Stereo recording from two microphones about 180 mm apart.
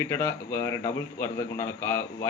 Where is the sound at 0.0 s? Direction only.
15° left (ahead or behind).